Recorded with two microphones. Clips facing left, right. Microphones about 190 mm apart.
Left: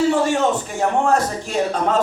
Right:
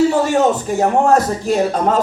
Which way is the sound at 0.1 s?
40° right (ahead or behind).